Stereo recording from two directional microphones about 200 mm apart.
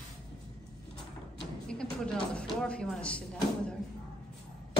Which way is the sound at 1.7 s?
5° left (ahead or behind).